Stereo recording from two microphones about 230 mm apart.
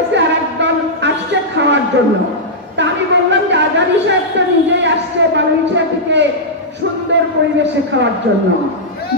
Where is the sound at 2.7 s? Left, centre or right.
Right.